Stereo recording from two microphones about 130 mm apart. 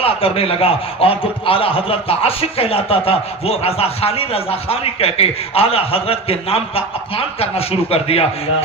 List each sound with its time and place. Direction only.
0.0 s a man's voice: 50° left (ahead or behind)